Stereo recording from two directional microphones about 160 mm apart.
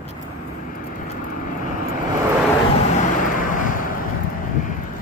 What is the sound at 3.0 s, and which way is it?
Vehicle, 60° left (ahead or behind).